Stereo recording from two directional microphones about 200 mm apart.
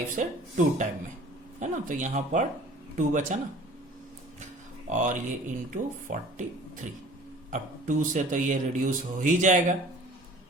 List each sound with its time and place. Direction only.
0.2 s a man's voice: 40° right (ahead or behind)
4.9 s a man's voice: 40° right (ahead or behind)
7.5 s a man's voice: 40° right (ahead or behind)